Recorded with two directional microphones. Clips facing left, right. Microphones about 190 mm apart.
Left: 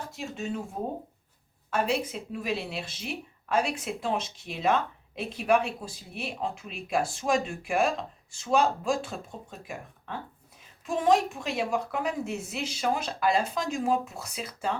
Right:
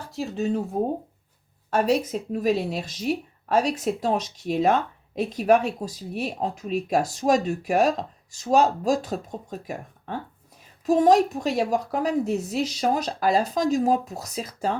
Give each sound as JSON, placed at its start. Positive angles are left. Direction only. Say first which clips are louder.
{"t": 0.1, "sound": "speech", "louder": "right 11 dB", "side_deg": -35}